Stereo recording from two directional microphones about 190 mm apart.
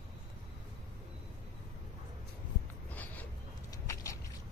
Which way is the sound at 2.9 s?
10° left (ahead or behind).